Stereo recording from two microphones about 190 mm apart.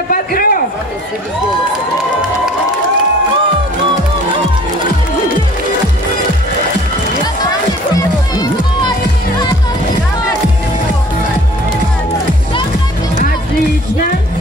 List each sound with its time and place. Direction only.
0.1 s a man's voice: 50° left (ahead or behind)